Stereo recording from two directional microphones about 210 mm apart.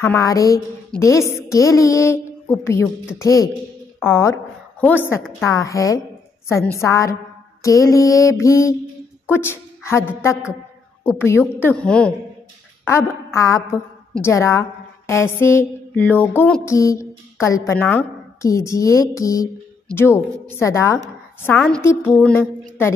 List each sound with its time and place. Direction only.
0.0 s a woman's voice: 15° left (ahead or behind)
13.3 s a woman's voice: 15° left (ahead or behind)